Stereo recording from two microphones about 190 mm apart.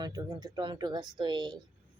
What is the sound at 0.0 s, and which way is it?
Speech, 20° right (ahead or behind).